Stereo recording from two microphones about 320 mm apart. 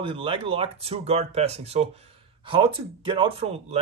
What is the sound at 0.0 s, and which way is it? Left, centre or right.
Speech, centre.